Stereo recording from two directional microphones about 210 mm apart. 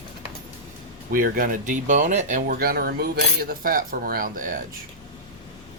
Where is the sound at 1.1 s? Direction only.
45° right (ahead or behind).